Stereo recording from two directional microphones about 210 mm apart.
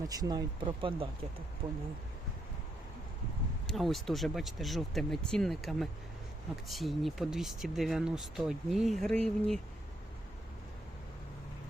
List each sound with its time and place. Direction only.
0.1 s speech: 20° right (ahead or behind)
3.7 s speech: centre (ahead or behind)